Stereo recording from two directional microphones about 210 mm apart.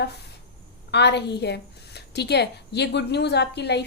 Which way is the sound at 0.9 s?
55° left (ahead or behind).